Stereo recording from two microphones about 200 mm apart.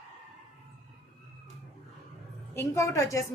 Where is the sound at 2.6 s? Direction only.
15° left (ahead or behind).